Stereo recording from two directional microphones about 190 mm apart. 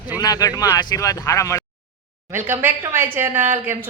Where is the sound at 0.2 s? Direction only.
20° left (ahead or behind).